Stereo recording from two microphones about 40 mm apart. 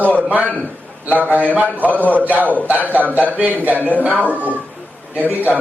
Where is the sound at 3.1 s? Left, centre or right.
Right.